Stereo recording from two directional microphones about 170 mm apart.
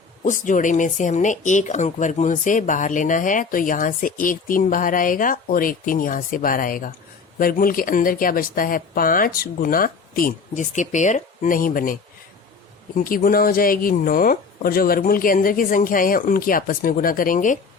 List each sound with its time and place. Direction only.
0.2 s speech: 50° left (ahead or behind)
13.1 s speech: 55° left (ahead or behind)